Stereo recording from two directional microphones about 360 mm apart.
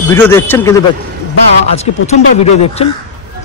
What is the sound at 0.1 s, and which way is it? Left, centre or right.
Speech, centre.